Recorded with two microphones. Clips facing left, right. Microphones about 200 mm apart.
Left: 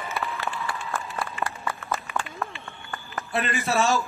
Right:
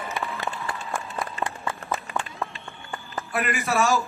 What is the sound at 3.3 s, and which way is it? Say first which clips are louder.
Speech: even; 25° left (ahead or behind).